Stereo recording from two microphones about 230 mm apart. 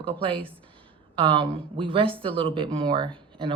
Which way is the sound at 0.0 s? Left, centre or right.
Right.